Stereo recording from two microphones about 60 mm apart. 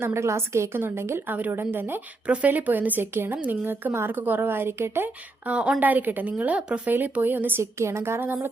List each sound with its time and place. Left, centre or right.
0.0 s a sound: right
0.8 s a woman's voice: right
1.4 s a woman's voice: right
2.2 s a woman's voice: right
5.5 s a woman's voice: centre
5.8 s a woman's voice: right
7.6 s a sound: right